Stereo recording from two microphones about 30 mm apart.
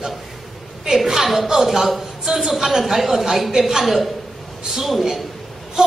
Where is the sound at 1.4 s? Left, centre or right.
Centre.